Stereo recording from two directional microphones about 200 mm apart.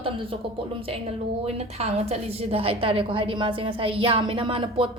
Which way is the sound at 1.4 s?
30° right (ahead or behind).